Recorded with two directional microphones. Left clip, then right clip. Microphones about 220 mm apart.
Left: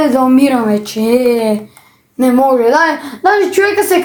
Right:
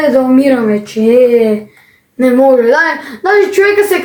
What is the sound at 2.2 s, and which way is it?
Speech, 35° left (ahead or behind).